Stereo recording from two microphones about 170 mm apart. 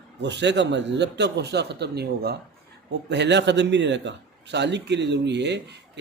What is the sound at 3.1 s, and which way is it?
A man's voice, 90° right.